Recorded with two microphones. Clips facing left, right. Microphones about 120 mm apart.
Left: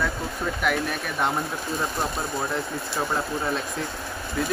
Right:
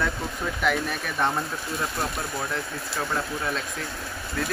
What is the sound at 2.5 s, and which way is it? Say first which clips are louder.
Speech: left 3 dB; 15° left (ahead or behind).